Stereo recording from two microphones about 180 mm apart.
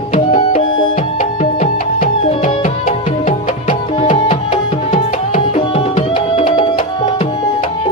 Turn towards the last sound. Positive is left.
turn(degrees=30)  # may be behind; listen again after turning